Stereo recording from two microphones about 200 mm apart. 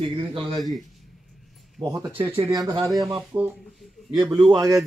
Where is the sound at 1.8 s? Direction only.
15° right (ahead or behind).